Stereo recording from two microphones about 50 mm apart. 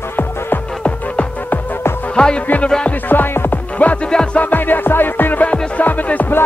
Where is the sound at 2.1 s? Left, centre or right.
Centre.